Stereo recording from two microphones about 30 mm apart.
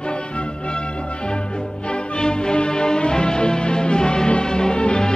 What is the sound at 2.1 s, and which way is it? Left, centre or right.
Music, left.